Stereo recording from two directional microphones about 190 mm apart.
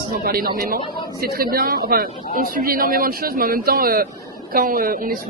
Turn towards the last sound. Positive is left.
turn(degrees=-50)  # may be behind; listen again after turning